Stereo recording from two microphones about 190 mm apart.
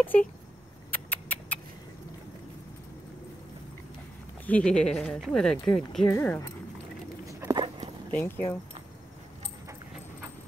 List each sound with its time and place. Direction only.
0.0 s speech: 10° left (ahead or behind)
0.9 s rodents: 10° left (ahead or behind)
4.5 s speech: 5° left (ahead or behind)
7.2 s dog: 20° right (ahead or behind)
8.1 s speech: 10° left (ahead or behind)